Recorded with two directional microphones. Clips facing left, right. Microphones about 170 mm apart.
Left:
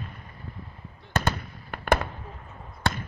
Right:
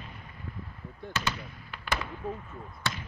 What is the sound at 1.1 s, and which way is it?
Fireworks, 50° left (ahead or behind).